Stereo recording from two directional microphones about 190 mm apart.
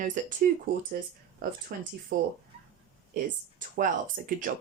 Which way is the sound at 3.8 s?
45° right (ahead or behind).